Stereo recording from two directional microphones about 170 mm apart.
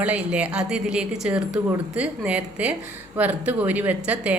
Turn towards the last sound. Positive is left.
turn(degrees=-10)  # may be behind; listen again after turning